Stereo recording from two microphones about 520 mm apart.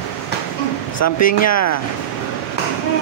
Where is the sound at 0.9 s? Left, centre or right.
Left.